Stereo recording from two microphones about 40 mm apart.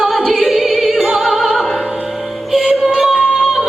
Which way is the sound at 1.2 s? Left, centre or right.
Centre.